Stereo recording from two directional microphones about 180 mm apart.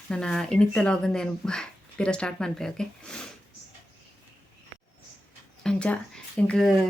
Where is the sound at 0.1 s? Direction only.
5° left (ahead or behind).